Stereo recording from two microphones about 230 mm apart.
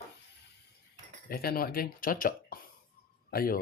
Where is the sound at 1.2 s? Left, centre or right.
Left.